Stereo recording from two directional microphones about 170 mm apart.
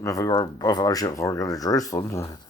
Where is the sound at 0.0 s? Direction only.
20° left (ahead or behind).